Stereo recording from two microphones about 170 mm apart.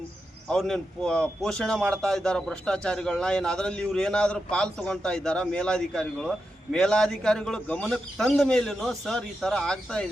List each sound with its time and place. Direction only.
0.4 s a man's voice: centre (ahead or behind)